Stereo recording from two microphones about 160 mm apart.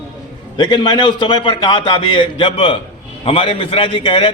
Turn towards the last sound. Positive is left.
turn(degrees=30)  # may be behind; listen again after turning